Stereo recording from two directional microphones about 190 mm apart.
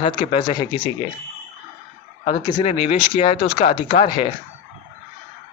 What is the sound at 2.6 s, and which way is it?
Speech, 30° left (ahead or behind).